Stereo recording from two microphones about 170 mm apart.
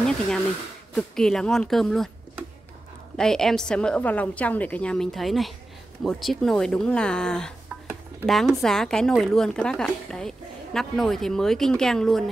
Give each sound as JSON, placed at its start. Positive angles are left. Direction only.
{"t": 0.9, "sound": "a woman's voice", "side_deg": 5}
{"t": 3.2, "sound": "a woman's voice", "side_deg": 5}